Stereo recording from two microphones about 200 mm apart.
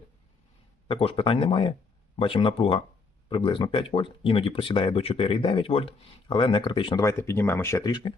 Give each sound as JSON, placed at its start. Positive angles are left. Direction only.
{"t": 0.9, "sound": "speech", "side_deg": 30}